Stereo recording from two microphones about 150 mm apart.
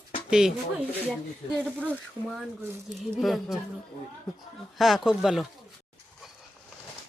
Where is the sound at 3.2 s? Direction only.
Centre (ahead or behind).